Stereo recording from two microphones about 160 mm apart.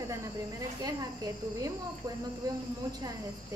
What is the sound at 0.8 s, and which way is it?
Speech, 20° right (ahead or behind).